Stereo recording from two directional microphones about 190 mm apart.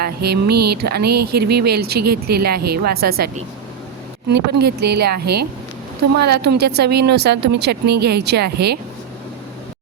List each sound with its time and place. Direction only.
0.0 s music: 55° right (ahead or behind)
4.3 s music: 60° right (ahead or behind)